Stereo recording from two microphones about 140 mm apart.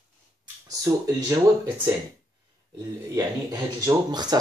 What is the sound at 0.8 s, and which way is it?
Speech, 25° right (ahead or behind).